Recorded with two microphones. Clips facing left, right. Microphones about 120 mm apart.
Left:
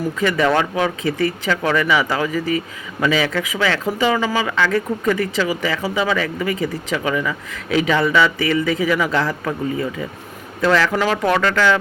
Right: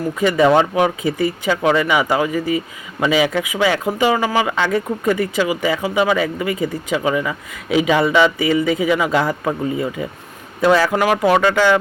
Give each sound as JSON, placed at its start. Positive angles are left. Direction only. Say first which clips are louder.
{"t": 0.2, "sound": "speech", "louder": "right 4 dB", "side_deg": -20}